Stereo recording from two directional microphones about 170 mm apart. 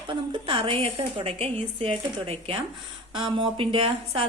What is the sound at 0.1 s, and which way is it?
A woman's voice, 30° right (ahead or behind).